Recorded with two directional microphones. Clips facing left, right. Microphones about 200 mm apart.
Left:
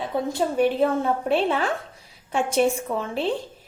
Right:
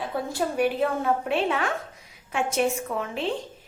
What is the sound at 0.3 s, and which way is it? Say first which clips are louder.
A woman's voice: left 3 dB; 25° left (ahead or behind).